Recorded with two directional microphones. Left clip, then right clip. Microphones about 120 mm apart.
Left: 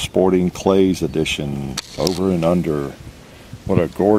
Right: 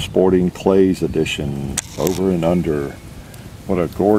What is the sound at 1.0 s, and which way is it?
Speech, 40° left (ahead or behind).